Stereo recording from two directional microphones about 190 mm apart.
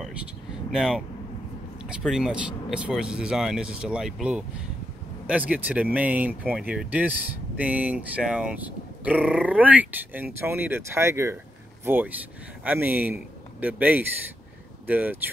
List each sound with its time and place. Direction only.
0.7 s a man's voice: 5° right (ahead or behind)